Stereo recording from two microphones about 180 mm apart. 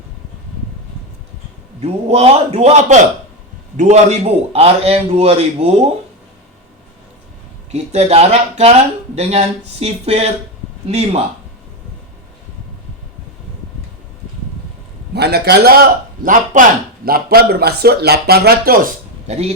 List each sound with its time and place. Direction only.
1.8 s speech: 35° right (ahead or behind)
7.7 s speech: 35° right (ahead or behind)
15.1 s speech: 65° right (ahead or behind); by 19.5 s 35° right (ahead or behind)